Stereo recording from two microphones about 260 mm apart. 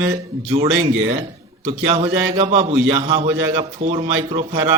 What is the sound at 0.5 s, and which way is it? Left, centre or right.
A man's voice, right.